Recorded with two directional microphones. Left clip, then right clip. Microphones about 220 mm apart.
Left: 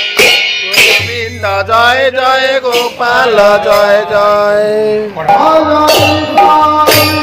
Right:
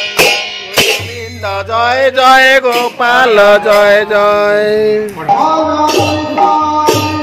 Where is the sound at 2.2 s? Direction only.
25° right (ahead or behind).